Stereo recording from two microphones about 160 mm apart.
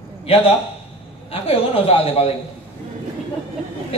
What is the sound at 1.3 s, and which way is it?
A man's voice, 40° left (ahead or behind).